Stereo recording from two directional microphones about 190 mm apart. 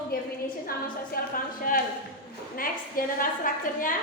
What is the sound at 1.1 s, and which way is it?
A woman's voice, 50° left (ahead or behind).